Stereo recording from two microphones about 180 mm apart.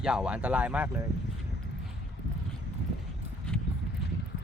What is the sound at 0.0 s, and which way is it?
Speech, 5° right (ahead or behind).